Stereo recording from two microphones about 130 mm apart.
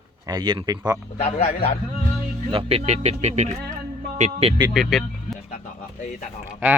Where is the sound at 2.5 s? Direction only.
45° right (ahead or behind).